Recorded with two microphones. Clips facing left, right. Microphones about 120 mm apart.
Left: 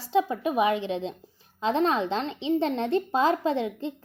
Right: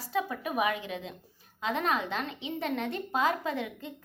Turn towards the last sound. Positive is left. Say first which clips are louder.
# left 7 dB
turn(degrees=30)  # may be behind; listen again after turning